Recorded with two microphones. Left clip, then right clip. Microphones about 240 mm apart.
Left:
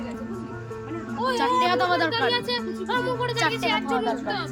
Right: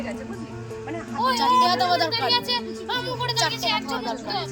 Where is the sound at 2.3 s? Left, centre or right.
Centre.